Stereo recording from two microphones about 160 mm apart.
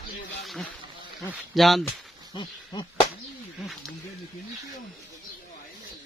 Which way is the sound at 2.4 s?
30° left (ahead or behind).